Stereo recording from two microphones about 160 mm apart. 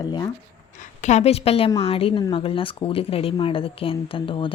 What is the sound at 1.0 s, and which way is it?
A woman's voice, 40° left (ahead or behind).